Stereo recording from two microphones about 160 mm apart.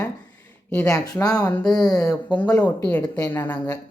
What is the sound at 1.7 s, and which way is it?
Speech, 25° left (ahead or behind).